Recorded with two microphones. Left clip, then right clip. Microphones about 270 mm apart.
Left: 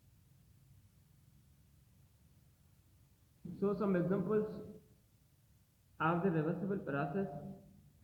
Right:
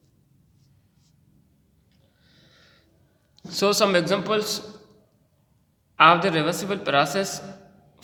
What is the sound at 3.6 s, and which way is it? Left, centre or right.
Speech, right.